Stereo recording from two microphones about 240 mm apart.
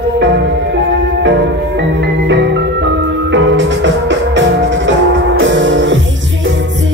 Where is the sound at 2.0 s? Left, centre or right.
Right.